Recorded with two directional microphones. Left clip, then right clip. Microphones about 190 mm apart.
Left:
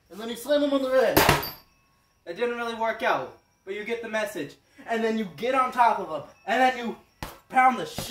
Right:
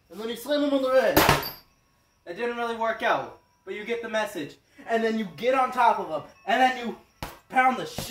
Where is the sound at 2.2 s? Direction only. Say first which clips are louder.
Left 1 dB; 15° left (ahead or behind).